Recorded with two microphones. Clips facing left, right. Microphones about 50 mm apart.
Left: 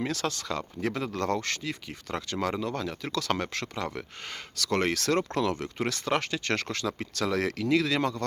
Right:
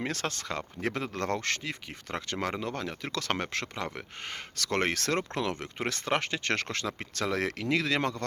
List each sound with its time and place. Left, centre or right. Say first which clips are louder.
0.1 s speech: left 3 dB; right